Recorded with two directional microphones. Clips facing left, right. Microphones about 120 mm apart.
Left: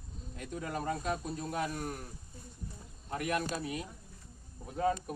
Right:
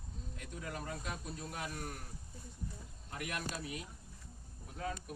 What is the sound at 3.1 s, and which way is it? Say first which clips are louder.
Speech: left 8 dB; 35° left (ahead or behind).